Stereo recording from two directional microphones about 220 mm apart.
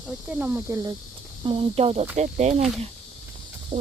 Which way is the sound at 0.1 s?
5° right (ahead or behind).